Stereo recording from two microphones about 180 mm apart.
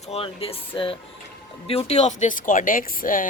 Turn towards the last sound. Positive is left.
turn(degrees=50)  # may be behind; listen again after turning